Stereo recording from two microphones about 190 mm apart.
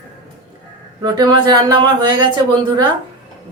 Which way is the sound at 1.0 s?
20° right (ahead or behind).